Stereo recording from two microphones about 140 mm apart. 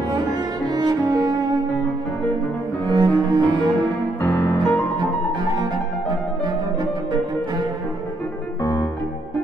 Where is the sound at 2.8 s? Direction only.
30° right (ahead or behind).